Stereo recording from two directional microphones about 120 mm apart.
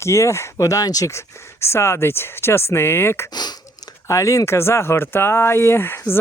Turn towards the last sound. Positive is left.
turn(degrees=20)  # may be behind; listen again after turning